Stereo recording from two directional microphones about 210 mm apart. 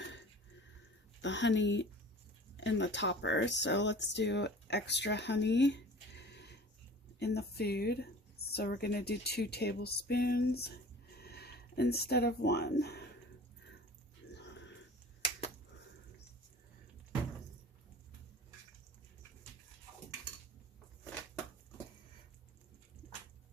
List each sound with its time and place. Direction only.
0.0 s drip: 60° left (ahead or behind)
1.2 s speech: 60° left (ahead or behind)
14.3 s a sound: 55° left (ahead or behind)